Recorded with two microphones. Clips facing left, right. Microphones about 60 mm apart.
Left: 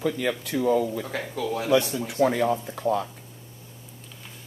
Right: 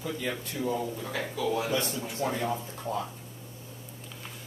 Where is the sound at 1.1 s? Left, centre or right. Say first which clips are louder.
Left 1 dB; left.